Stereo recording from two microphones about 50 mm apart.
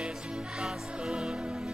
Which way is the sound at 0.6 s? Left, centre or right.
Centre.